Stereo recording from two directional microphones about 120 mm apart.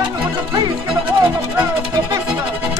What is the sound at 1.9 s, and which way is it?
Music, 30° right (ahead or behind).